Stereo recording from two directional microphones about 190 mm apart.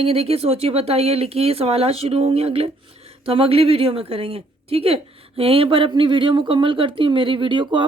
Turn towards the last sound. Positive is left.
turn(degrees=-25)  # may be behind; listen again after turning